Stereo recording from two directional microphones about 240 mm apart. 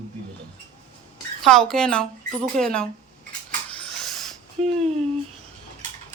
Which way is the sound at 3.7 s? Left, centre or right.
Centre.